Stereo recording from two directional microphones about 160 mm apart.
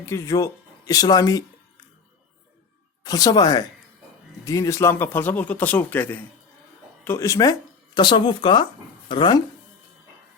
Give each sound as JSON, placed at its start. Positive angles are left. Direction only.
{"t": 0.0, "sound": "speech", "side_deg": 15}
{"t": 3.0, "sound": "speech", "side_deg": 25}